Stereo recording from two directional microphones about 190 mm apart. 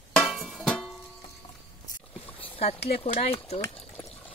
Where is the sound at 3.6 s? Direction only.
5° left (ahead or behind).